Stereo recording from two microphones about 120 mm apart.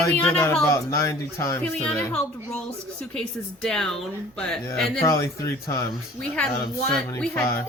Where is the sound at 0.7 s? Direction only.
25° left (ahead or behind).